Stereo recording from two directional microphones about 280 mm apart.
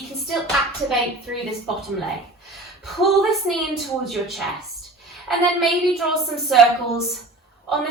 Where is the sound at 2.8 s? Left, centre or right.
Centre.